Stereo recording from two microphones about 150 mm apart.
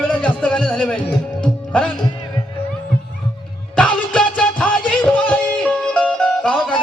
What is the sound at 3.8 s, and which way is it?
Music, 5° left (ahead or behind).